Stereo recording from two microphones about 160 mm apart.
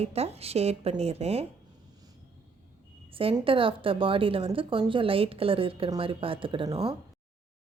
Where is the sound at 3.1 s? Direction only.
35° right (ahead or behind).